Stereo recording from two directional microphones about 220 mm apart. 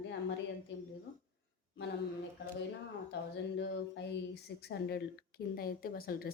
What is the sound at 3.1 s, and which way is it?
Speech, 50° left (ahead or behind).